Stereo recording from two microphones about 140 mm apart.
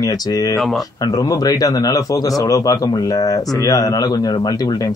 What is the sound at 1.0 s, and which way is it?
A man's voice, 25° left (ahead or behind).